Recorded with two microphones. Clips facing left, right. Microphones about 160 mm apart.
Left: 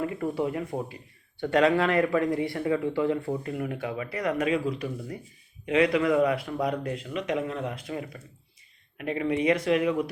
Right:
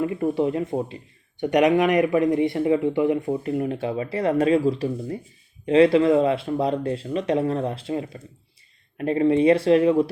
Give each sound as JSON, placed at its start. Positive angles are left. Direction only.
{"t": 0.0, "sound": "speech", "side_deg": -25}